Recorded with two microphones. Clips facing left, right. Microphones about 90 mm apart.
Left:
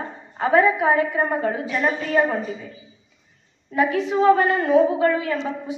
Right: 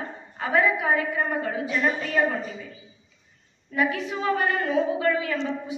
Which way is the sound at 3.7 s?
25° left (ahead or behind).